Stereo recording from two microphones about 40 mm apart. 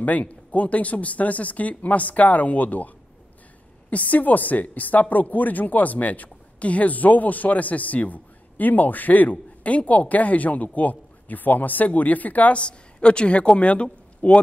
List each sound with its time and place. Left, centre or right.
0.0 s speech: left
3.9 s speech: left
12.5 s a woman's voice: left